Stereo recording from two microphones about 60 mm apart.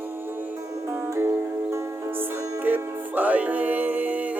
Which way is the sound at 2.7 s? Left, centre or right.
Right.